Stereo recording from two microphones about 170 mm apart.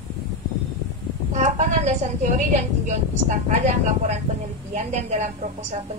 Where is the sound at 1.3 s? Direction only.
45° right (ahead or behind).